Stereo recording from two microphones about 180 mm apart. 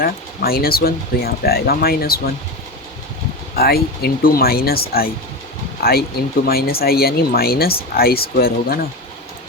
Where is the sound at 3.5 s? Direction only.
60° left (ahead or behind).